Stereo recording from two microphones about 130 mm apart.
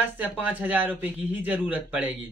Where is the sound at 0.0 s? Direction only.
10° right (ahead or behind).